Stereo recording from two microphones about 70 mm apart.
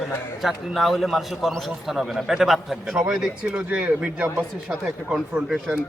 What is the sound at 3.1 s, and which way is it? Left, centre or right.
Speech, centre.